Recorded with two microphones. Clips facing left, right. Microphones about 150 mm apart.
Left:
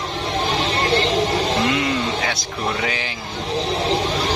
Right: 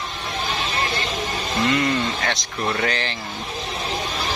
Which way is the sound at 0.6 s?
85° left.